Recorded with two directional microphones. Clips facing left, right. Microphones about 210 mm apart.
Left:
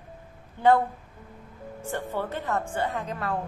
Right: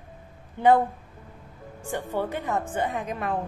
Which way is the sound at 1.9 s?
15° right (ahead or behind).